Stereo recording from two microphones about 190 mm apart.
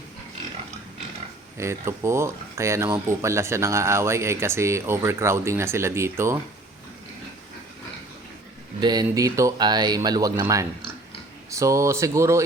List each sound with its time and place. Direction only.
1.5 s speech: 15° right (ahead or behind)
8.8 s speech: 20° right (ahead or behind)